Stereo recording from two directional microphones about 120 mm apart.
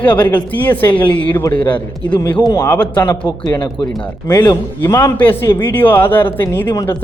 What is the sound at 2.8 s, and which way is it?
Speech, 15° left (ahead or behind).